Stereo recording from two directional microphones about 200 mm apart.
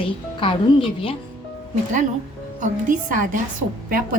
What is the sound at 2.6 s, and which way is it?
Speech, 40° right (ahead or behind).